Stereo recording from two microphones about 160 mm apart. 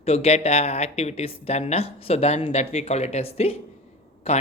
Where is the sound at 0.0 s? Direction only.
40° left (ahead or behind).